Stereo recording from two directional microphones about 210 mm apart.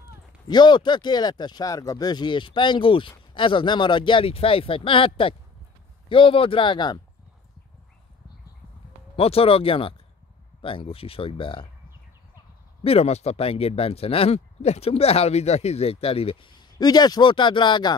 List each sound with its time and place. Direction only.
0.5 s speech: 20° left (ahead or behind)
9.1 s speech: 25° left (ahead or behind)
12.8 s speech: 30° left (ahead or behind)